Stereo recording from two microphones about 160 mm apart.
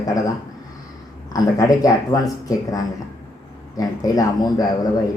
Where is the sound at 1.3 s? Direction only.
20° left (ahead or behind).